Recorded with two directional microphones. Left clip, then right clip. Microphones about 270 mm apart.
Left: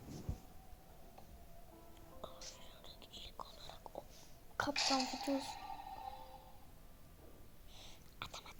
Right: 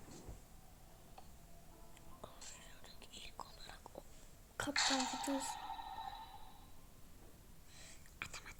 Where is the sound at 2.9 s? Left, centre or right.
Right.